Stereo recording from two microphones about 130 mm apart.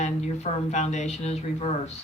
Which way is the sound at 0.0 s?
60° left (ahead or behind).